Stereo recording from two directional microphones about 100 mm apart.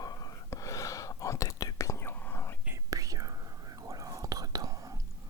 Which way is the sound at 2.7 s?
35° right (ahead or behind).